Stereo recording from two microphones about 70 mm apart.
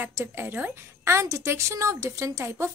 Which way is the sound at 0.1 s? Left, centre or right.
Right.